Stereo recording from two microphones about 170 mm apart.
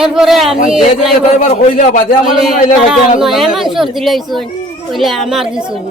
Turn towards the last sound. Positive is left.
turn(degrees=-5)  # may be behind; listen again after turning